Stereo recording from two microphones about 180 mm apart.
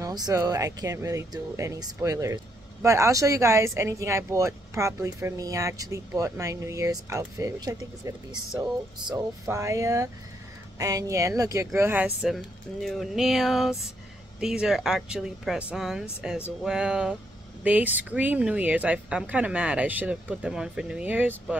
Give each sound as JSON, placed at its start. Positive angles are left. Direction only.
{"t": 0.0, "sound": "speech", "side_deg": -20}